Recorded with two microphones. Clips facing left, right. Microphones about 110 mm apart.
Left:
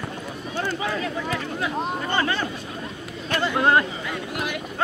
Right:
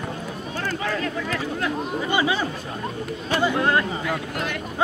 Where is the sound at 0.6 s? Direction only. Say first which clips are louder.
Right 2 dB; 15° left (ahead or behind).